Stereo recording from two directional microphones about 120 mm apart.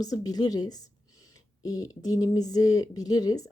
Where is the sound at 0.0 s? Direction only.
30° left (ahead or behind).